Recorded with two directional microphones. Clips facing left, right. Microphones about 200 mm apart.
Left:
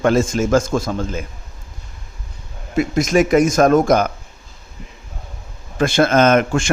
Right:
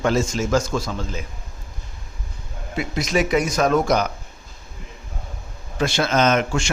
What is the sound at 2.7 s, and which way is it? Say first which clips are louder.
A man's voice: left 7 dB; 50° left (ahead or behind).